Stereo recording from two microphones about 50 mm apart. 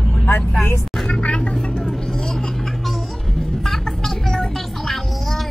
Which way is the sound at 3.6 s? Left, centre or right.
Centre.